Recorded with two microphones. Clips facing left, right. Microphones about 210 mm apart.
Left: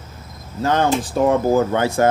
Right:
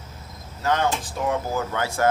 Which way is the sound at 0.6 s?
30° left (ahead or behind).